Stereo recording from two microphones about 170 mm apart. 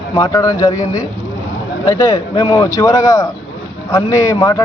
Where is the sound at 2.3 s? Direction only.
30° left (ahead or behind).